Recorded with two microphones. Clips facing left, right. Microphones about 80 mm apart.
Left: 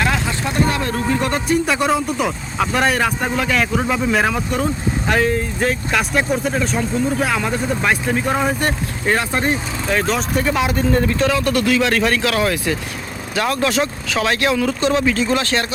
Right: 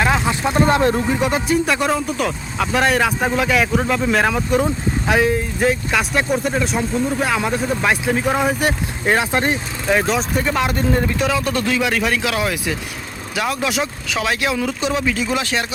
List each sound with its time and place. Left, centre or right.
0.0 s vehicle: centre
0.7 s speech: right
1.1 s speech: centre
11.2 s speech: centre
11.8 s speech: centre